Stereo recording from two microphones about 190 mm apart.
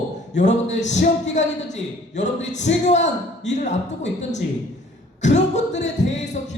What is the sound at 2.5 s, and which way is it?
Speech, 40° left (ahead or behind).